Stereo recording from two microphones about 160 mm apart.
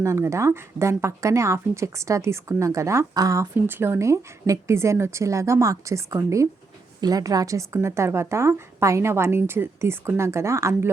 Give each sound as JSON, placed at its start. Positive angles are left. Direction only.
{"t": 0.0, "sound": "speech", "side_deg": -20}